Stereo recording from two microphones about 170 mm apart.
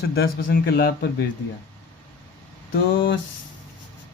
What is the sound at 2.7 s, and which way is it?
Mantra, 90° left.